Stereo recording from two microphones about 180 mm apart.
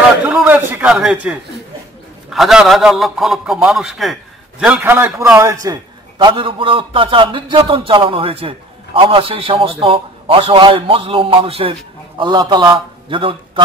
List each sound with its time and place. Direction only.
0.2 s a man's voice: 5° right (ahead or behind); by 13.4 s 30° right (ahead or behind)